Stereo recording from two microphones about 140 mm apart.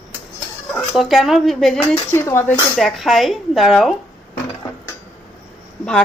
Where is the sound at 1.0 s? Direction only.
Centre (ahead or behind).